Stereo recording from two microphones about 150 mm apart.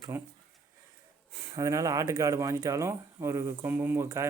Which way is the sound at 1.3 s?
20° right (ahead or behind).